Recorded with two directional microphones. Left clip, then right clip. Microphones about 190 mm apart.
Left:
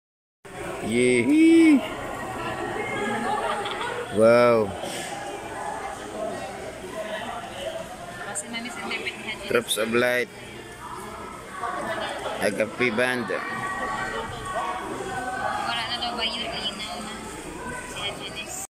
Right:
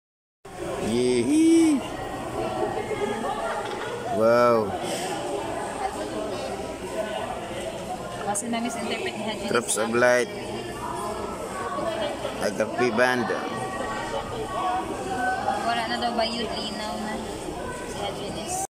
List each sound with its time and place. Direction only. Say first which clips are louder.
0.9 s mantra: left 3 dB; centre (ahead or behind)
4.2 s a man's voice: left 2 dB; 5° left (ahead or behind)
9.5 s a man's voice: left 2 dB; centre (ahead or behind)
12.4 s speech: left 1 dB; 5° left (ahead or behind)
15.9 s speech: right 2 dB; 50° right (ahead or behind)